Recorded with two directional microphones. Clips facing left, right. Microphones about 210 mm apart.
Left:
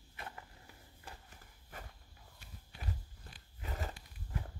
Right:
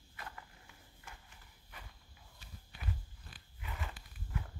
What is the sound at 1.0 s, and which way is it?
Walk, 40° left (ahead or behind).